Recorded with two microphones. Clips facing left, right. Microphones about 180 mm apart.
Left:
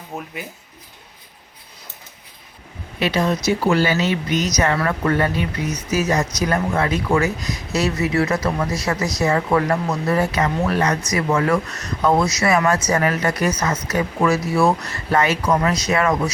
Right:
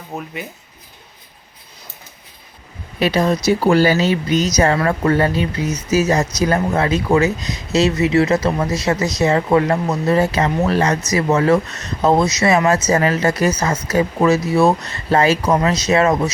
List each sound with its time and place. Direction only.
0.1 s speech: 5° right (ahead or behind)
3.0 s speech: 40° right (ahead or behind)